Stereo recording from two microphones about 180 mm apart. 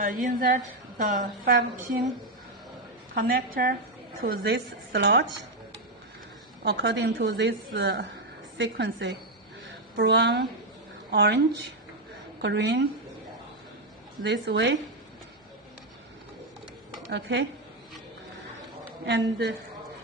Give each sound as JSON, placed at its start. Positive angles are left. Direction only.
{"t": 0.3, "sound": "speech", "side_deg": -50}
{"t": 3.2, "sound": "a woman's voice", "side_deg": -55}
{"t": 6.6, "sound": "a woman's voice", "side_deg": -65}
{"t": 12.4, "sound": "a woman's voice", "side_deg": -75}
{"t": 14.2, "sound": "a woman's voice", "side_deg": -70}
{"t": 17.1, "sound": "a woman's voice", "side_deg": -75}
{"t": 19.0, "sound": "a woman's voice", "side_deg": -70}